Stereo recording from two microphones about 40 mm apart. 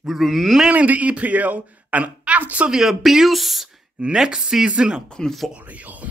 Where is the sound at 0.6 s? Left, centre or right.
Right.